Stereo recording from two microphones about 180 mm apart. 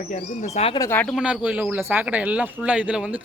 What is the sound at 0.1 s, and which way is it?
Speech, 40° left (ahead or behind).